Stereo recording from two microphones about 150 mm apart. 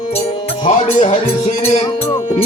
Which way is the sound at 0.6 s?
40° left (ahead or behind).